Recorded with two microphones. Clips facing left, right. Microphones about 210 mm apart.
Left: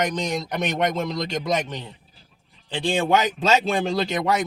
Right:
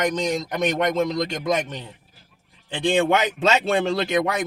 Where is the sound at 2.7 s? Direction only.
55° right (ahead or behind).